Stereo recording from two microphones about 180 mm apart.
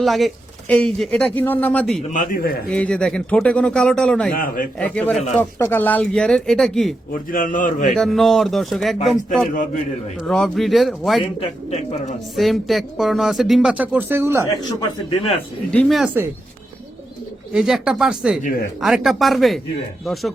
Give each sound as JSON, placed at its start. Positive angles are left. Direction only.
{"t": 0.0, "sound": "speech", "side_deg": 0}
{"t": 2.0, "sound": "a man's voice", "side_deg": 45}
{"t": 2.6, "sound": "speech", "side_deg": 5}
{"t": 4.3, "sound": "a man's voice", "side_deg": 50}
{"t": 4.8, "sound": "speech", "side_deg": 5}
{"t": 7.3, "sound": "a man's voice", "side_deg": 50}
{"t": 7.9, "sound": "speech", "side_deg": 0}
{"t": 11.2, "sound": "speech", "side_deg": 35}
{"t": 12.4, "sound": "speech", "side_deg": 0}
{"t": 15.7, "sound": "speech", "side_deg": 5}
{"t": 17.5, "sound": "speech", "side_deg": 0}
{"t": 18.4, "sound": "speech", "side_deg": 55}
{"t": 18.8, "sound": "speech", "side_deg": 0}